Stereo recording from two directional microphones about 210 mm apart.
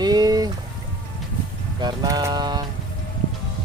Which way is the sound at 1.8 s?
20° right (ahead or behind).